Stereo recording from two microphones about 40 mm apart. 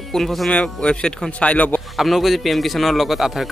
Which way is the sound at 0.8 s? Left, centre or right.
Centre.